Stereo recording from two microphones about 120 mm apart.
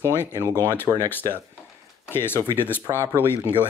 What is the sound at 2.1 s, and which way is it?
Speech, 20° left (ahead or behind).